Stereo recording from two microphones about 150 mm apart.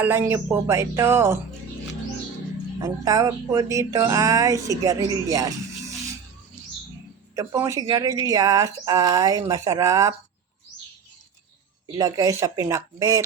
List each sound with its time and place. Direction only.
0.0 s speech: 15° right (ahead or behind)
2.8 s speech: 20° right (ahead or behind)
7.3 s speech: 20° right (ahead or behind)
11.9 s speech: 25° right (ahead or behind)